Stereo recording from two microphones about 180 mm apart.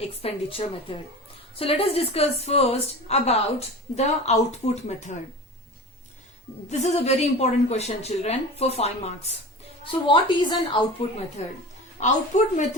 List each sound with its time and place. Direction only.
0.0 s a woman's voice: 35° left (ahead or behind)
6.7 s a woman's voice: 40° left (ahead or behind)